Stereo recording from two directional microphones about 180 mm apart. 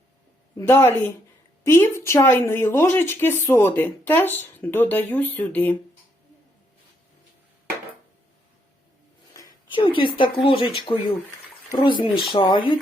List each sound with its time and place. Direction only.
0.5 s a woman's voice: 10° left (ahead or behind)
9.3 s a sound: 20° left (ahead or behind)
10.3 s speech: 30° left (ahead or behind)